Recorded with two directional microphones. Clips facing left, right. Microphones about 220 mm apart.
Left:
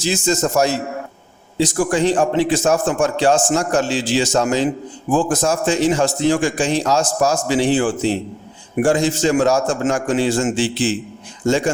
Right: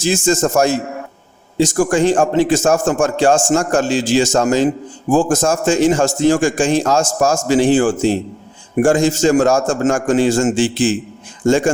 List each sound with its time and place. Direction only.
0.0 s a man's voice: 50° right (ahead or behind)